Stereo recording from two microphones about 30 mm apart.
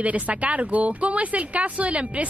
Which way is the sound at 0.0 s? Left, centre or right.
Right.